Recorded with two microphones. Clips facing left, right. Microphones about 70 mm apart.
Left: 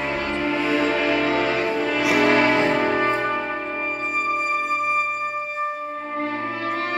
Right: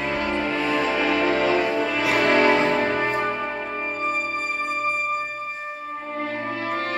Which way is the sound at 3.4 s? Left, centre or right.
Centre.